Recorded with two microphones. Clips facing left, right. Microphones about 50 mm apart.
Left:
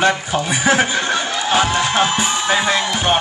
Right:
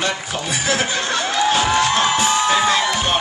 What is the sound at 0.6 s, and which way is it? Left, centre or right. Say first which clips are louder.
Speech: left 5 dB; left.